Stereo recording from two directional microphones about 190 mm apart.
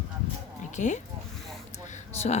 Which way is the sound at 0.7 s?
40° left (ahead or behind).